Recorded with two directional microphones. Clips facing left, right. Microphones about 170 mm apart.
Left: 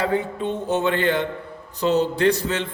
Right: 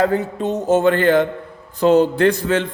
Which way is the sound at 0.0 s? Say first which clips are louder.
Right 5 dB; 40° right (ahead or behind).